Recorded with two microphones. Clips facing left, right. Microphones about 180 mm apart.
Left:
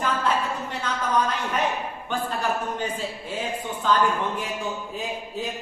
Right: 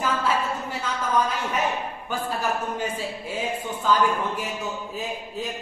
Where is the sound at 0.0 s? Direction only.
5° right (ahead or behind).